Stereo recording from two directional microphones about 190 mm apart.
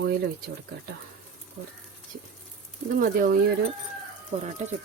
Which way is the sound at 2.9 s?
45° right (ahead or behind).